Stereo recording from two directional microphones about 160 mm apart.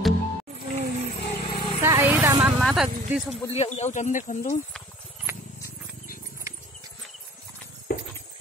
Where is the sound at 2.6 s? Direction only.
Centre (ahead or behind).